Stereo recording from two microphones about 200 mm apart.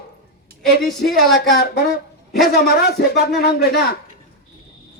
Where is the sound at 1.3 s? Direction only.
55° left (ahead or behind).